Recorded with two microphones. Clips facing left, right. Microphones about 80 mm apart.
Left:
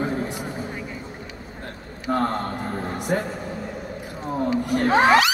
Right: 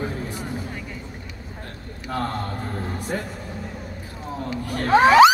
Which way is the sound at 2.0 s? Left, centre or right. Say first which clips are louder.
Left 4 dB; left.